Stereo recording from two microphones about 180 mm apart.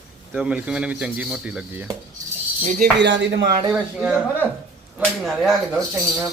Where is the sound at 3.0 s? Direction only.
80° right; by 3.6 s 65° right (ahead or behind).